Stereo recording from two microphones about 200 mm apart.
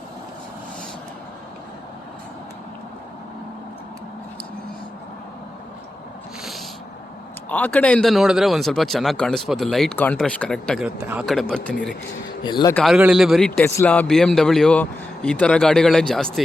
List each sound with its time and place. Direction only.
7.5 s a man's voice: 5° left (ahead or behind)
12.4 s a man's voice: 20° left (ahead or behind)
12.7 s a man's voice: centre (ahead or behind)
13.6 s a man's voice: 15° left (ahead or behind)